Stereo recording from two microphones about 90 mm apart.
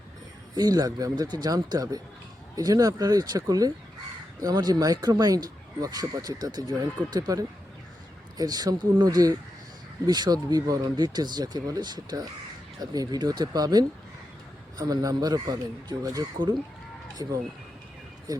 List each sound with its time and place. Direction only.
0.5 s speech: 45° right (ahead or behind)